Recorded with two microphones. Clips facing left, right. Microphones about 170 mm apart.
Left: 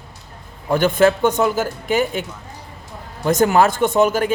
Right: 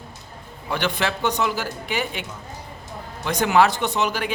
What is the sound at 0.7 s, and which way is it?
Speech, 45° left (ahead or behind).